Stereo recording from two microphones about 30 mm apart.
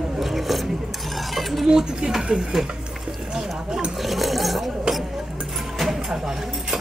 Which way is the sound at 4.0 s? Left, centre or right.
Centre.